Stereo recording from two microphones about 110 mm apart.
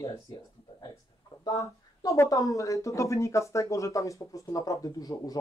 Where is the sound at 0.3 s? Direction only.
40° left (ahead or behind).